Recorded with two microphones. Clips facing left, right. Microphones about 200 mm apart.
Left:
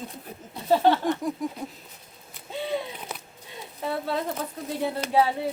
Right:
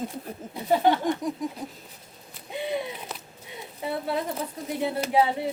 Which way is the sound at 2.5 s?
15° right (ahead or behind).